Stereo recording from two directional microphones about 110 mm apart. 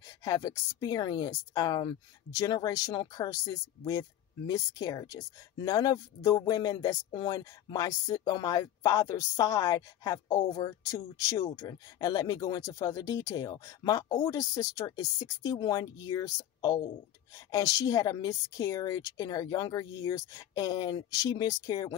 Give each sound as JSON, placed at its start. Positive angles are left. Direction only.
{"t": 0.2, "sound": "speech", "side_deg": 35}